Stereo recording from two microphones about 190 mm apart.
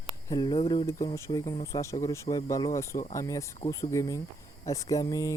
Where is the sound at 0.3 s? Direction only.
20° left (ahead or behind).